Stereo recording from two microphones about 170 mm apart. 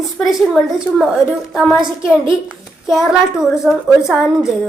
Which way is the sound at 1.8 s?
30° right (ahead or behind).